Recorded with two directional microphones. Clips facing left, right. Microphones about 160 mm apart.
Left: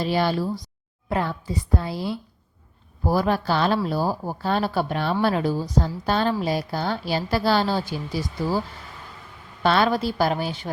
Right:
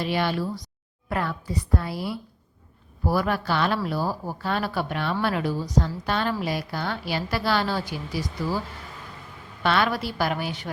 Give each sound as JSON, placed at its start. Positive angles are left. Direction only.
{"t": 0.0, "sound": "speech", "side_deg": 35}
{"t": 1.1, "sound": "a woman's voice", "side_deg": 25}
{"t": 9.6, "sound": "a woman's voice", "side_deg": 30}